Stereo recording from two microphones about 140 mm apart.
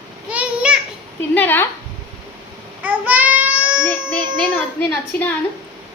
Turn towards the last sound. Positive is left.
turn(degrees=15)  # may be behind; listen again after turning